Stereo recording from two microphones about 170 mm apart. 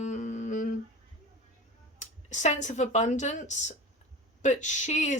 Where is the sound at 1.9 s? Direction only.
45° left (ahead or behind).